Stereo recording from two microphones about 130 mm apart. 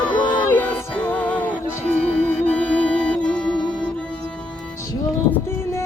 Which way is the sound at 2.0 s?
10° left (ahead or behind).